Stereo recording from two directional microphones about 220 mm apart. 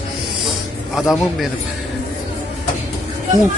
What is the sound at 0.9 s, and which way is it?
Speech, centre (ahead or behind).